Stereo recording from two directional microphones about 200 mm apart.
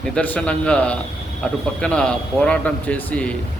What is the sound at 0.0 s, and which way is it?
A man's voice, 5° left (ahead or behind).